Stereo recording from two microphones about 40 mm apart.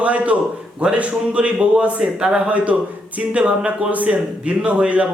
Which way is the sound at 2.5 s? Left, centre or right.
Right.